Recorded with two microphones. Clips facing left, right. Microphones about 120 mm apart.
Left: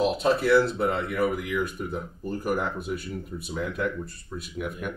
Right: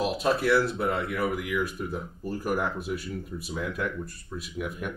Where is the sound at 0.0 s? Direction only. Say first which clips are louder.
Left 2 dB; 5° right (ahead or behind).